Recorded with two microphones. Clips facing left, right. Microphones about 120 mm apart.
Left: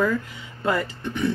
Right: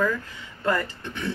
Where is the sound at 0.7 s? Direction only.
10° left (ahead or behind).